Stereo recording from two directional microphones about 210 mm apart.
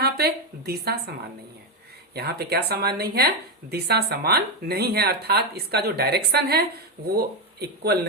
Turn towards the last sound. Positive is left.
turn(degrees=-50)  # may be behind; listen again after turning